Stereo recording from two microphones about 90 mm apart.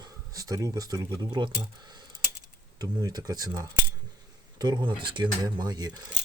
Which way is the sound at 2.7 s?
45° right (ahead or behind).